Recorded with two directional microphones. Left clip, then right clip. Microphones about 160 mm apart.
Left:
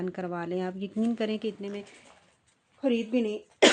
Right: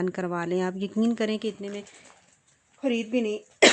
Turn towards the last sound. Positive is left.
turn(degrees=-30)  # may be behind; listen again after turning